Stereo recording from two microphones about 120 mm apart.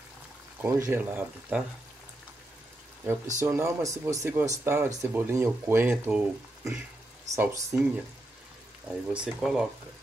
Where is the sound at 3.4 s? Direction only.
20° right (ahead or behind).